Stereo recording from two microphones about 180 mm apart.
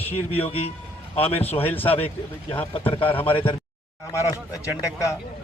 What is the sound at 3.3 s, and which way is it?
Speech, 30° left (ahead or behind).